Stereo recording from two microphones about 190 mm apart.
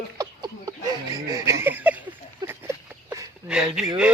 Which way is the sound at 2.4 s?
15° right (ahead or behind).